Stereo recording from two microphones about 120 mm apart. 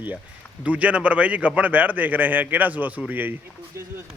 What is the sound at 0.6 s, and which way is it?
A man's voice, 10° right (ahead or behind).